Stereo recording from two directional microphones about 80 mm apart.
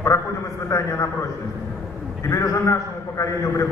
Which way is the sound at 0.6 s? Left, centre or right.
Left.